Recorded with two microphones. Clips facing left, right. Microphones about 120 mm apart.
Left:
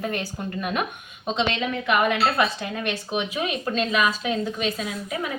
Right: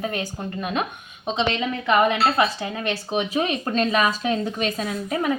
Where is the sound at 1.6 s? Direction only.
25° right (ahead or behind).